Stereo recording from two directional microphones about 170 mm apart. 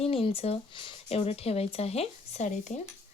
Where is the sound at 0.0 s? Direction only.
35° left (ahead or behind).